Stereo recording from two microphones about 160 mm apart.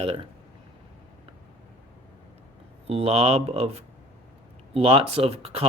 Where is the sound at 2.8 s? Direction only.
40° right (ahead or behind).